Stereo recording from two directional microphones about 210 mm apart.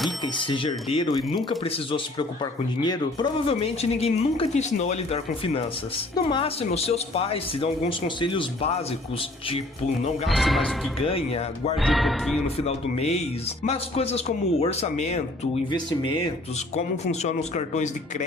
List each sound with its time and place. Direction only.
0.3 s speech: 25° left (ahead or behind)
10.2 s speech: centre (ahead or behind)
11.8 s speech: centre (ahead or behind)
12.5 s speech: 30° left (ahead or behind)
16.7 s speech: 30° left (ahead or behind)